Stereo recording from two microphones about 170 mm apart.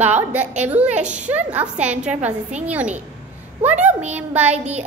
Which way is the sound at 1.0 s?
45° right (ahead or behind).